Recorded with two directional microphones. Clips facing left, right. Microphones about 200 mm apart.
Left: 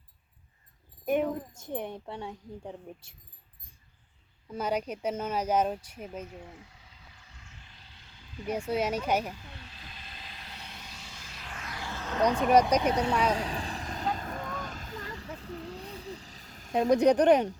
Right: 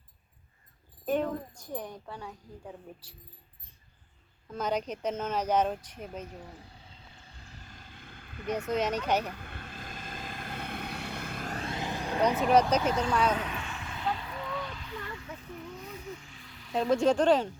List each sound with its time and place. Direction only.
1.0 s speech: 15° left (ahead or behind)
1.5 s speech: 25° left (ahead or behind)
4.4 s speech: 10° left (ahead or behind)
6.2 s vehicle: 40° right (ahead or behind); by 8.4 s 55° right (ahead or behind)
8.4 s speech: 10° left (ahead or behind)
9.3 s vehicle: 55° right (ahead or behind)
11.5 s music: 30° right (ahead or behind)
12.5 s speech: 10° left (ahead or behind)
12.9 s speech: 25° left (ahead or behind)
13.2 s vehicle: 35° left (ahead or behind)
15.6 s a sound: 35° left (ahead or behind)
16.9 s speech: 20° left (ahead or behind)